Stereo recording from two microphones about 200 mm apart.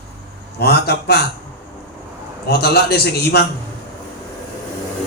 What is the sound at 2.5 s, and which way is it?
A man's voice, 50° left (ahead or behind).